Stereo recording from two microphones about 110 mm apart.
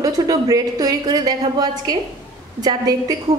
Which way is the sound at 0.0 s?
35° right (ahead or behind).